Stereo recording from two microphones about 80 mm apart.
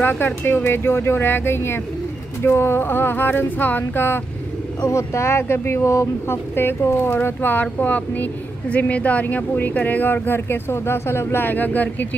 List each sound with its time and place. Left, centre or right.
0.0 s speech: left
4.8 s speech: left